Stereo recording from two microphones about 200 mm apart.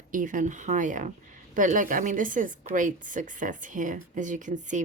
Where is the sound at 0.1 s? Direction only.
40° right (ahead or behind).